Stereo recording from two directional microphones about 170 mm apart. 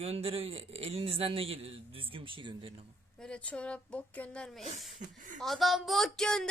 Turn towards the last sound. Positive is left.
turn(degrees=5)  # may be behind; listen again after turning